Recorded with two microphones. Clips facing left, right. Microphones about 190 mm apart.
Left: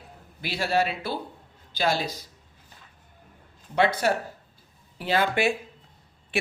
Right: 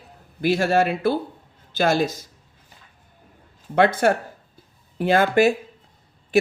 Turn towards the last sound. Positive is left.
turn(degrees=-40)  # may be behind; listen again after turning